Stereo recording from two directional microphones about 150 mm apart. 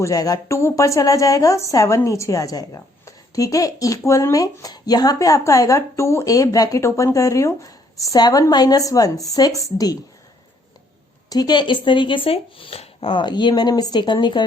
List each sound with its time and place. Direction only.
0.0 s speech: 25° left (ahead or behind)
11.3 s speech: 30° left (ahead or behind)